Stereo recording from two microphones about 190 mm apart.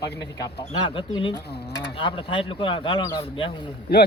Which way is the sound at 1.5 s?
60° left (ahead or behind).